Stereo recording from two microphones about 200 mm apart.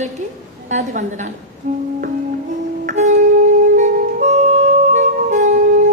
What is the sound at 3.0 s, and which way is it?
Music, 35° right (ahead or behind).